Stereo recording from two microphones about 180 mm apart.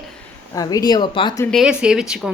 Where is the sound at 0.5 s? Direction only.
20° left (ahead or behind).